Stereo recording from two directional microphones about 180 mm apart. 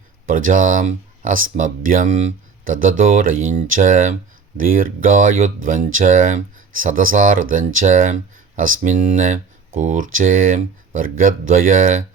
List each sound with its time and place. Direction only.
0.3 s speech: 45° right (ahead or behind)